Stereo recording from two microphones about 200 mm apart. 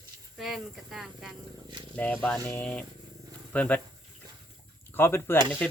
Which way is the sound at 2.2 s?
10° left (ahead or behind).